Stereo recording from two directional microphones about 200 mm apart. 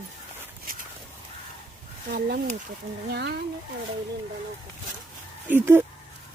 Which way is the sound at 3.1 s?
55° right (ahead or behind).